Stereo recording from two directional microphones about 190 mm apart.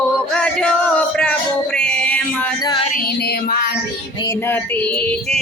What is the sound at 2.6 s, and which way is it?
Music, 25° left (ahead or behind).